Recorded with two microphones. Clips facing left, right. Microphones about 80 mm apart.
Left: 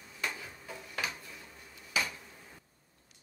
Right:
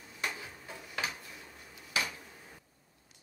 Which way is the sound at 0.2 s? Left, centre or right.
Centre.